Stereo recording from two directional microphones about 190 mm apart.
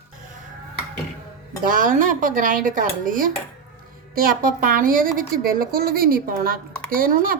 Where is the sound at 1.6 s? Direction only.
45° right (ahead or behind).